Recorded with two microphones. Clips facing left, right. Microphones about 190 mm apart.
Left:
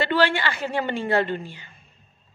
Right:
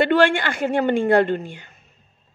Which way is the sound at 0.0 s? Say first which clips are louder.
Right 5 dB; 50° right (ahead or behind).